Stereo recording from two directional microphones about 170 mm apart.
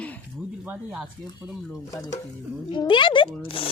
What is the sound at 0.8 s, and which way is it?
Speech, 5° right (ahead or behind).